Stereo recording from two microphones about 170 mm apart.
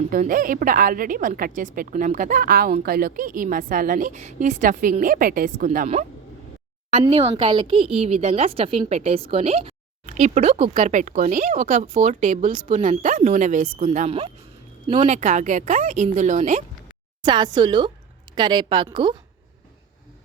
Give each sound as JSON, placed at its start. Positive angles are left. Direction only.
{"t": 0.1, "sound": "a woman's voice", "side_deg": -55}
{"t": 7.0, "sound": "a woman's voice", "side_deg": -35}
{"t": 17.2, "sound": "a woman's voice", "side_deg": -25}